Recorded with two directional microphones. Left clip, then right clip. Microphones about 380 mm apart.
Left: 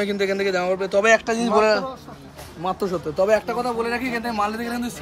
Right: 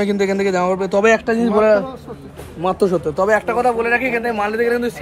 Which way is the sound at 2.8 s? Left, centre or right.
Right.